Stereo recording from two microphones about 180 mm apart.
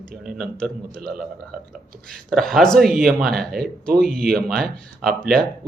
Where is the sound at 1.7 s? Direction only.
Centre (ahead or behind).